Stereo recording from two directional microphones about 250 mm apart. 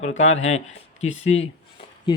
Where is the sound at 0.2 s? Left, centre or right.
Left.